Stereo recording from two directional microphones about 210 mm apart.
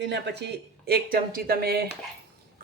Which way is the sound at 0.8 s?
45° right (ahead or behind).